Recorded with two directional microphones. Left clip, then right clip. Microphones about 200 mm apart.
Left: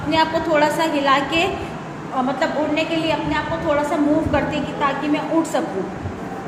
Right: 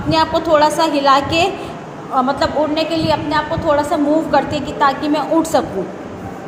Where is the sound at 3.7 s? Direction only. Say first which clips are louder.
Right 5 dB; 25° right (ahead or behind).